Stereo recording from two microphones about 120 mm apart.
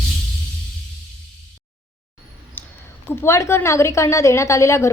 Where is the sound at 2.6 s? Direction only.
15° left (ahead or behind).